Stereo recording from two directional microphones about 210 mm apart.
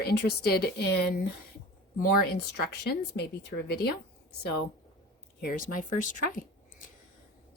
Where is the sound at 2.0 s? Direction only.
50° left (ahead or behind).